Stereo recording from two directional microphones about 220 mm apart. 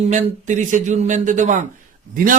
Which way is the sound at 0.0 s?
35° right (ahead or behind).